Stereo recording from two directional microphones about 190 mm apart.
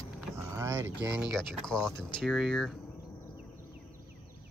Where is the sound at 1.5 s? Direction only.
5° left (ahead or behind).